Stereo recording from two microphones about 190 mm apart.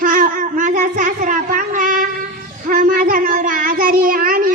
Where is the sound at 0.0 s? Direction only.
45° right (ahead or behind).